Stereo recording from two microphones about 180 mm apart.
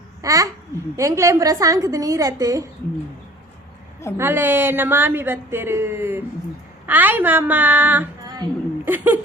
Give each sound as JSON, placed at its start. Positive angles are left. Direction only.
{"t": 0.2, "sound": "a child's voice", "side_deg": -20}
{"t": 4.2, "sound": "a woman's voice", "side_deg": -10}